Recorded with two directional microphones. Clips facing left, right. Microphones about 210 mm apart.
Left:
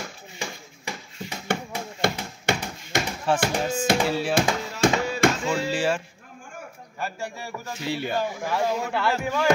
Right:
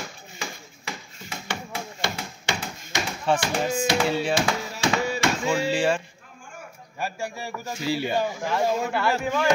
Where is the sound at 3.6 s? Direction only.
10° right (ahead or behind).